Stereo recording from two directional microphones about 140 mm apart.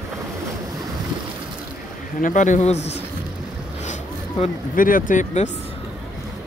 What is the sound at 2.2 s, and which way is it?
Speech, 65° left (ahead or behind).